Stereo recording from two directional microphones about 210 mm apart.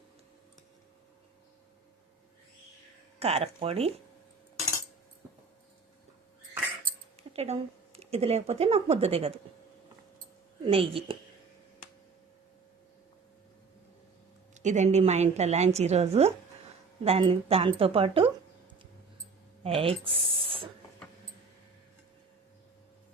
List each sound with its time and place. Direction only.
3.2 s a woman's voice: 30° right (ahead or behind)
7.2 s speech: 30° right (ahead or behind)
10.7 s a woman's voice: 25° right (ahead or behind)
14.5 s a woman's voice: 35° right (ahead or behind)
19.6 s speech: 25° right (ahead or behind)